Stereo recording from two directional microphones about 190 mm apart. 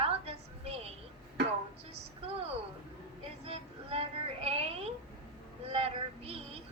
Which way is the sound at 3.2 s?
30° right (ahead or behind).